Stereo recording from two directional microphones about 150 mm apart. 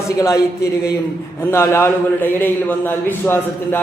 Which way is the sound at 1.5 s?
15° left (ahead or behind).